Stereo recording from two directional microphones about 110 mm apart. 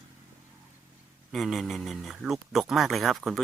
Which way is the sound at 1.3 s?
Centre (ahead or behind).